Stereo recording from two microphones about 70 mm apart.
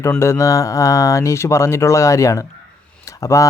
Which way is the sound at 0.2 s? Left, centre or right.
Left.